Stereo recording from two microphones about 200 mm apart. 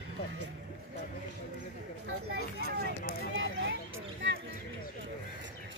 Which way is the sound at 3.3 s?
70° right (ahead or behind).